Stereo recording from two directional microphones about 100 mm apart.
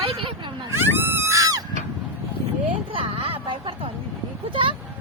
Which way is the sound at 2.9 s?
65° right (ahead or behind).